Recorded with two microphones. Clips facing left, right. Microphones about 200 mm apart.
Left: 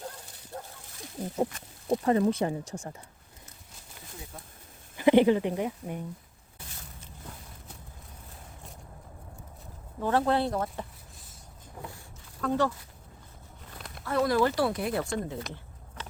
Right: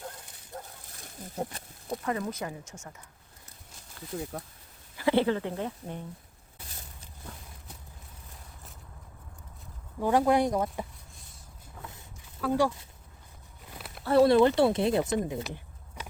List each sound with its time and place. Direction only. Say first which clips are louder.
1.9 s speech: left 8 dB; 30° left (ahead or behind)
4.3 s speech: right 8 dB; 60° right (ahead or behind)
4.9 s speech: left 5 dB; 20° left (ahead or behind)
10.0 s speech: right 2 dB; 15° right (ahead or behind)
12.4 s speech: right 1 dB; 10° right (ahead or behind)
13.7 s bird: right 1 dB; 5° right (ahead or behind)
14.0 s speech: right 5 dB; 30° right (ahead or behind)